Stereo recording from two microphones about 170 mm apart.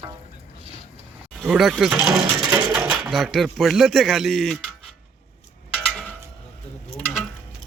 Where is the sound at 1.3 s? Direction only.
Centre (ahead or behind).